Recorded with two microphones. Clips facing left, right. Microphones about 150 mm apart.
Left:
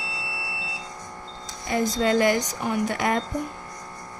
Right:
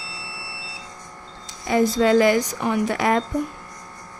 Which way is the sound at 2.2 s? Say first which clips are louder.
Right 4 dB; 90° right.